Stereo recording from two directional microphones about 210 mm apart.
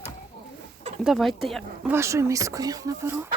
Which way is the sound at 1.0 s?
Centre (ahead or behind).